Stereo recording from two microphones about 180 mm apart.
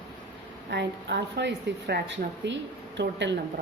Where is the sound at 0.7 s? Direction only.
70° right (ahead or behind).